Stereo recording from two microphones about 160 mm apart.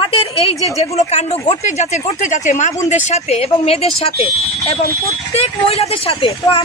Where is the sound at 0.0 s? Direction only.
35° left (ahead or behind).